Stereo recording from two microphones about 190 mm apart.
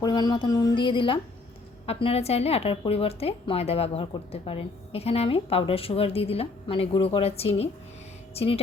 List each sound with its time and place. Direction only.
0.0 s music: 20° left (ahead or behind)
1.9 s speech: 30° left (ahead or behind)